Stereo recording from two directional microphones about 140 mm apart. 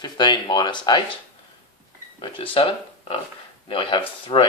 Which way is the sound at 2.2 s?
40° left (ahead or behind).